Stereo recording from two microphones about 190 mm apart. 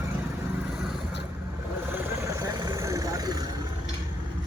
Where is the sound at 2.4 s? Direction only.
15° right (ahead or behind).